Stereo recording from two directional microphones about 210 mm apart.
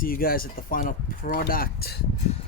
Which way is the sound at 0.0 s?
45° left (ahead or behind).